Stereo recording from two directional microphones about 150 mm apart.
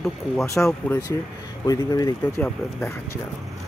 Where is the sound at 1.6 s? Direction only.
25° left (ahead or behind).